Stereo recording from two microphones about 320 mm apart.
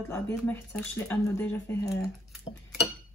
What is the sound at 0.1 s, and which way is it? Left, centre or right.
Speech, centre.